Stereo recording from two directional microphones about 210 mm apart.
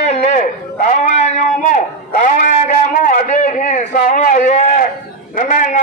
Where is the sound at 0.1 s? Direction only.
35° left (ahead or behind).